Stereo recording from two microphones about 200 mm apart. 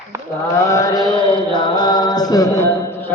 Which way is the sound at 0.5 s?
15° left (ahead or behind).